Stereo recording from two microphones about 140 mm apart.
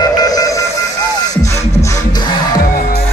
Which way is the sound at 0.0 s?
30° left (ahead or behind).